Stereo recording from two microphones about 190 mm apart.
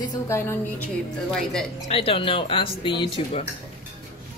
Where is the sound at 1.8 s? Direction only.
30° left (ahead or behind).